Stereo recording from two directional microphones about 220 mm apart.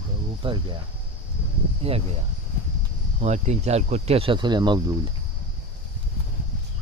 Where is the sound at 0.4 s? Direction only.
20° right (ahead or behind).